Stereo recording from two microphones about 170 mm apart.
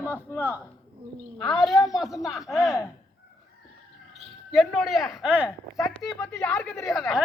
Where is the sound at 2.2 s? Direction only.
Centre (ahead or behind).